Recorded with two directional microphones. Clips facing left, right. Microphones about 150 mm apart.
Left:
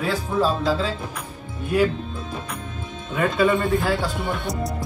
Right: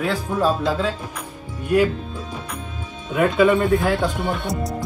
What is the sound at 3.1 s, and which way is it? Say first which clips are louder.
Speech: right 3 dB; 10° right (ahead or behind).